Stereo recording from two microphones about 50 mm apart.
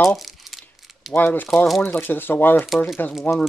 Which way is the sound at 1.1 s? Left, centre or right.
Left.